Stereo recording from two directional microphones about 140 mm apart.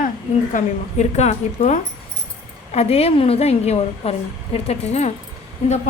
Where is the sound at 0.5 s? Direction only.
55° left (ahead or behind).